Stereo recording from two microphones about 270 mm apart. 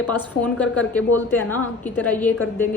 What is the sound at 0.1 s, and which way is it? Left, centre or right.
A woman's voice, centre.